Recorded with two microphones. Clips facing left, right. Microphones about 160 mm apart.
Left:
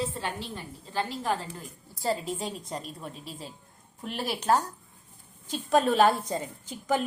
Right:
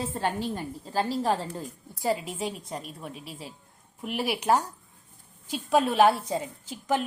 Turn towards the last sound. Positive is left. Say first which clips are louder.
# even
turn(degrees=-5)  # may be behind; listen again after turning